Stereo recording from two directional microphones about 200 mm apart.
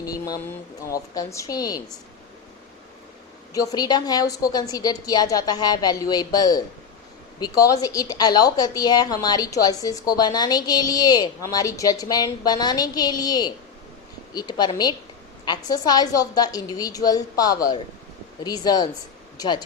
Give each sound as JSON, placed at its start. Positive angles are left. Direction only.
{"t": 0.0, "sound": "speech", "side_deg": 20}
{"t": 3.5, "sound": "a woman's voice", "side_deg": 15}